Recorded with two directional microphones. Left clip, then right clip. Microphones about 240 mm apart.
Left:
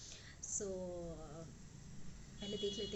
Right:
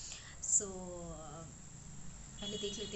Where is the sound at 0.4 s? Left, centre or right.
Right.